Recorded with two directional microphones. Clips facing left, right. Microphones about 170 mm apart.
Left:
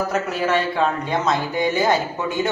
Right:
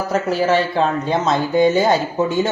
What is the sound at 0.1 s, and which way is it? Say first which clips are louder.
Speech: right 4 dB; 30° right (ahead or behind).